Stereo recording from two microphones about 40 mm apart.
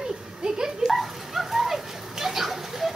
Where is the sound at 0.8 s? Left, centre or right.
Centre.